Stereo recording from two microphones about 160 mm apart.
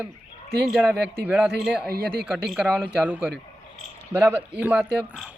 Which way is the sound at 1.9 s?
70° right (ahead or behind).